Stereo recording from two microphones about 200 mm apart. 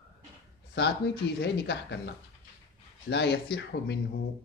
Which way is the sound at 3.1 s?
60° left (ahead or behind).